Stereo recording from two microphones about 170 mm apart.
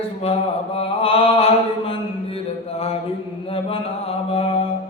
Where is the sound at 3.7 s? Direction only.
35° left (ahead or behind).